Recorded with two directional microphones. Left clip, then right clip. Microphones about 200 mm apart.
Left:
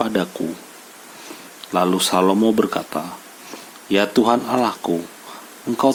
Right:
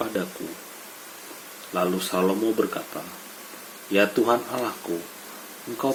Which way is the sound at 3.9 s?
40° left (ahead or behind).